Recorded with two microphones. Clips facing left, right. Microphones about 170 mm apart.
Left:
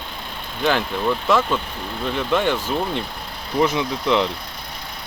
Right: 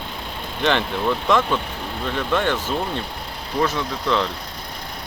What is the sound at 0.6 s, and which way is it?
Speech, 5° left (ahead or behind).